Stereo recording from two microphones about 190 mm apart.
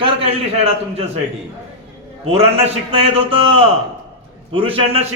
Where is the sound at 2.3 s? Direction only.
30° right (ahead or behind).